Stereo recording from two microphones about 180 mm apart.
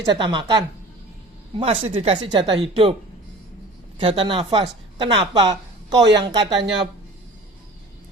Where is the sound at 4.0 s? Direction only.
30° right (ahead or behind).